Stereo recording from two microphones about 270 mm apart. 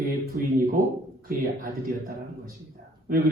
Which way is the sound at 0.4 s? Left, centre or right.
Right.